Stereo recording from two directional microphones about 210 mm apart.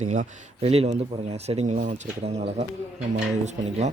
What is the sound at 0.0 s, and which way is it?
Speech, 35° right (ahead or behind).